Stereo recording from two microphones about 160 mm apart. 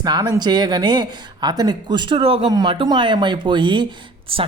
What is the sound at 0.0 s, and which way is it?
Speech, 25° right (ahead or behind).